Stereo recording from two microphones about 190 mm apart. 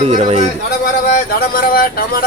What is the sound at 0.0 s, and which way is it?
Speech, 35° right (ahead or behind).